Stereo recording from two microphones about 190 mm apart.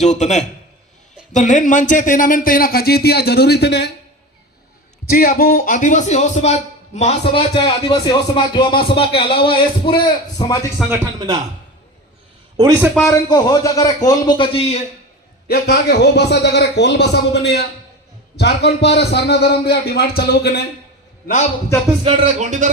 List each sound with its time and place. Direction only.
0.0 s a man's voice: 35° left (ahead or behind); by 3.9 s 60° left (ahead or behind)
5.0 s a man's voice: 50° left (ahead or behind); by 10.7 s 20° left (ahead or behind)
11.0 s a man's voice: 20° right (ahead or behind)
12.5 s a man's voice: 15° right (ahead or behind)
13.1 s a man's voice: 20° left (ahead or behind)
15.4 s a man's voice: 55° left (ahead or behind)
22.0 s speech: 35° right (ahead or behind)